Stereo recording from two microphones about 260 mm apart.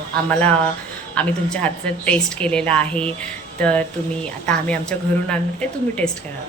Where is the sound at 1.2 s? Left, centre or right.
Centre.